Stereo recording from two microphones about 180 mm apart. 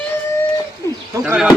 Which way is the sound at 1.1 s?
15° right (ahead or behind).